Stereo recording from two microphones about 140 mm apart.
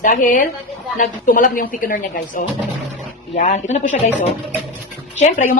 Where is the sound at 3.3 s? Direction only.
50° left (ahead or behind).